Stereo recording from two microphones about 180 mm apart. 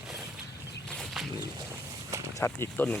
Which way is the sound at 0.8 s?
Centre (ahead or behind).